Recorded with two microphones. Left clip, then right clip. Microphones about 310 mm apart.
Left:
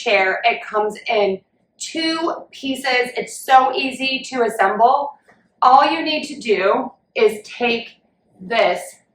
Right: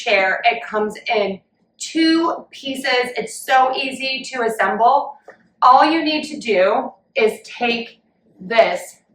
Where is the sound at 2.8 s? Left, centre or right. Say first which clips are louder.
Even; centre.